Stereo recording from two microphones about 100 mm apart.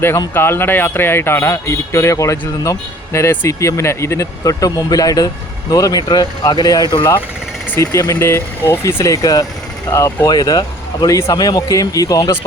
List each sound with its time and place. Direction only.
0.3 s speech: 25° left (ahead or behind)
9.1 s speech: 35° left (ahead or behind)